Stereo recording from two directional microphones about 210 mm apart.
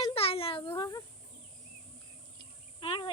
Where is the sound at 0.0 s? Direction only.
25° left (ahead or behind).